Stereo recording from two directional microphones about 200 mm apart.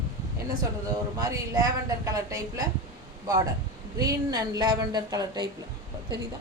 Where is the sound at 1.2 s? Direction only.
20° right (ahead or behind).